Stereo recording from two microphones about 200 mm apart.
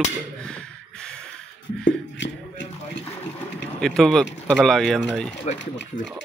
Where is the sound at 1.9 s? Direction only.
65° left (ahead or behind).